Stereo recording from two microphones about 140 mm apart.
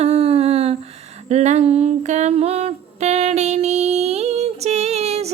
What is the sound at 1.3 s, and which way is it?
Music, 50° right (ahead or behind).